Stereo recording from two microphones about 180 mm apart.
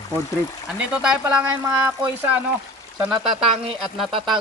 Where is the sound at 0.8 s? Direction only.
5° right (ahead or behind).